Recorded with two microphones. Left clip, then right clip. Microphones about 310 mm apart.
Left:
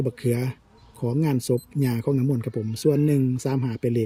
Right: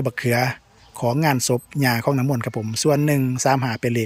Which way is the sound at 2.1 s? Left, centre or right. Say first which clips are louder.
Right 3 dB; right.